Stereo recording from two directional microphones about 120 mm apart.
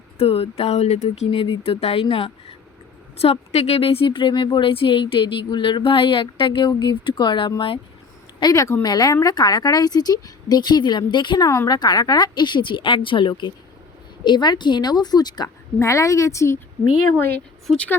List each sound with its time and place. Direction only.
0.2 s speech: 55° left (ahead or behind)
1.3 s a woman's voice: 50° left (ahead or behind)
8.4 s speech: 30° left (ahead or behind)
17.7 s speech: 10° left (ahead or behind)